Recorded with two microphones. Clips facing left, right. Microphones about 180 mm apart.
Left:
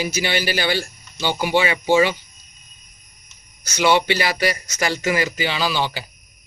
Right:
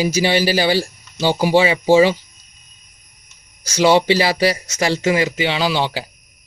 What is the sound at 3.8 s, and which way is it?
Speech, 30° right (ahead or behind).